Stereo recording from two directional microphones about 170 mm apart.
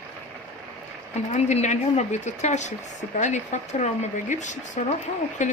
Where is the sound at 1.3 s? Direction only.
45° left (ahead or behind).